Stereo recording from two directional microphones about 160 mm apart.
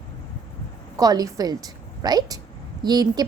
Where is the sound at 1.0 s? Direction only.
25° right (ahead or behind).